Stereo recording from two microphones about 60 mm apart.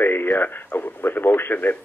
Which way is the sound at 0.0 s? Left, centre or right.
Left.